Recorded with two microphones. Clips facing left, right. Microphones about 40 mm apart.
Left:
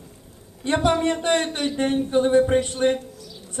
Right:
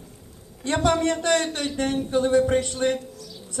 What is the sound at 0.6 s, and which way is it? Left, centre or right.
Speech, left.